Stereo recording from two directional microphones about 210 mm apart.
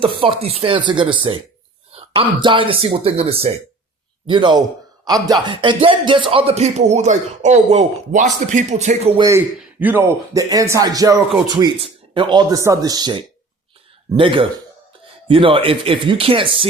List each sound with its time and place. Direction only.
0.2 s speech: 25° right (ahead or behind)
9.1 s speech: 15° right (ahead or behind)